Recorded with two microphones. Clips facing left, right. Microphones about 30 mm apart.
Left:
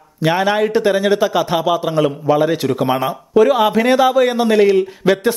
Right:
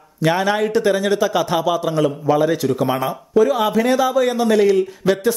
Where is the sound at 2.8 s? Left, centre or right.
Left.